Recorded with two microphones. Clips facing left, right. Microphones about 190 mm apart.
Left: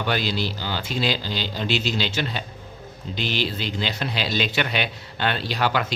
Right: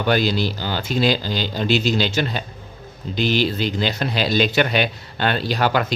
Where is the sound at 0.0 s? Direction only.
45° right (ahead or behind).